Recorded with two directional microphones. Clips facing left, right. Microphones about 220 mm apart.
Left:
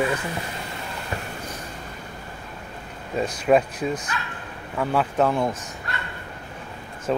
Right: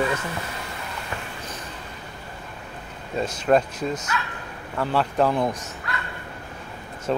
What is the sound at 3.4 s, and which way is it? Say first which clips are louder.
Speech: left 1 dB; 5° left (ahead or behind).